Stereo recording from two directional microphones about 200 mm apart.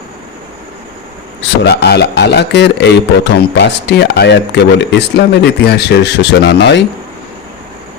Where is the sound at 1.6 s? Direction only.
55° left (ahead or behind).